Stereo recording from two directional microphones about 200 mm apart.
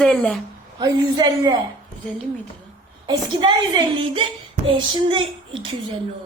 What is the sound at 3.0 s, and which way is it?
A woman's voice, 25° right (ahead or behind).